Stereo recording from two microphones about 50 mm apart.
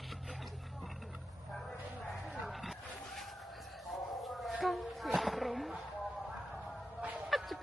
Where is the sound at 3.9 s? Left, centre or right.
Centre.